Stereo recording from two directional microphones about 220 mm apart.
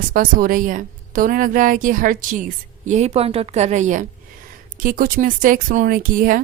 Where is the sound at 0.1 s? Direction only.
40° right (ahead or behind).